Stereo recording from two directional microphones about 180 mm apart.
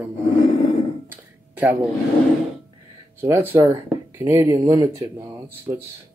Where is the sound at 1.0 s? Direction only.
10° right (ahead or behind).